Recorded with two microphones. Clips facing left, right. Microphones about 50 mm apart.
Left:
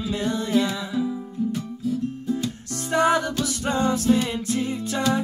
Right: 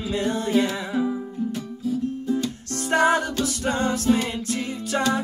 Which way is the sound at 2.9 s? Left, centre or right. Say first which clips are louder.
Right 1 dB; right.